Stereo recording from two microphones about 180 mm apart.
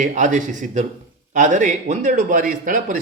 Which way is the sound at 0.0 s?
45° right (ahead or behind).